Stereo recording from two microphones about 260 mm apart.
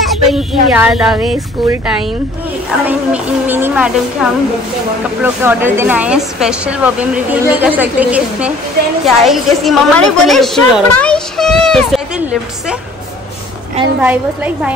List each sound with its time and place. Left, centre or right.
0.0 s a woman's voice: centre
14.0 s a woman's voice: centre